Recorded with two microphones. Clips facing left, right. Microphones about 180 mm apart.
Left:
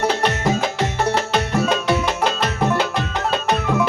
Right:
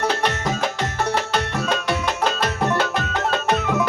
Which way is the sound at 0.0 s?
10° left (ahead or behind).